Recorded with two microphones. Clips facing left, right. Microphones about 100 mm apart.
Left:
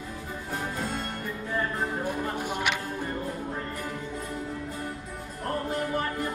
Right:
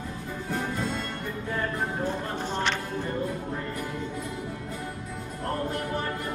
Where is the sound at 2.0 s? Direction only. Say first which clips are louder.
Even; 10° left (ahead or behind).